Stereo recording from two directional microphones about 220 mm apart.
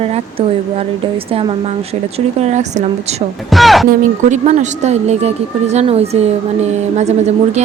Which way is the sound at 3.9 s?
35° right (ahead or behind).